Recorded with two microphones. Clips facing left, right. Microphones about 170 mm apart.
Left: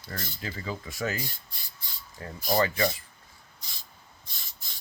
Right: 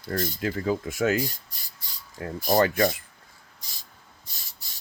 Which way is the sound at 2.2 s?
45° right (ahead or behind).